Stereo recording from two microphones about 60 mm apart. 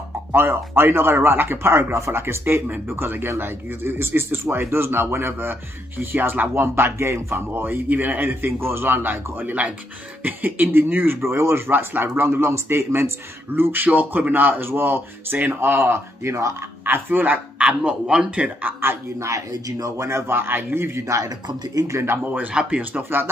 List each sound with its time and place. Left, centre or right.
0.3 s speech: right
13.6 s speech: right
16.8 s speech: right
17.6 s a man's voice: centre
18.7 s a woman's voice: right
21.0 s speech: right
21.9 s speech: right
22.5 s speech: centre
23.0 s speech: right